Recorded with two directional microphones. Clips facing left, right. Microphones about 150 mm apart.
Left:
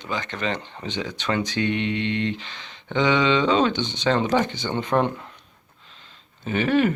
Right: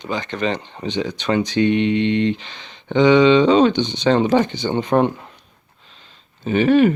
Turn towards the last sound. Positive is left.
turn(degrees=-20)  # may be behind; listen again after turning